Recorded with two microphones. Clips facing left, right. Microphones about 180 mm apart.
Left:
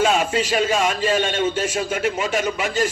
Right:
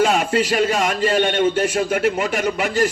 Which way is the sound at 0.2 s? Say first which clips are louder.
Right 2 dB; 60° right (ahead or behind).